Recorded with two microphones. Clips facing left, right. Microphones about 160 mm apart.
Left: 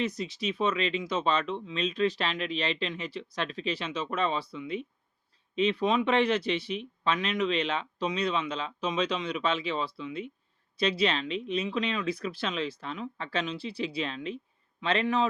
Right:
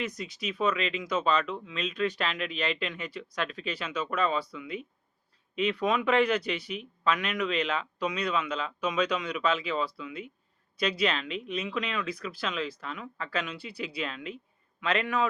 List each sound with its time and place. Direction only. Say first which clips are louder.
0.2 s speech: left 1 dB; 30° left (ahead or behind)